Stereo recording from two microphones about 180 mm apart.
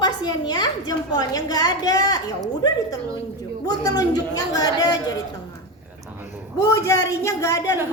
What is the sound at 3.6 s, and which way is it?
A woman's voice, 20° left (ahead or behind).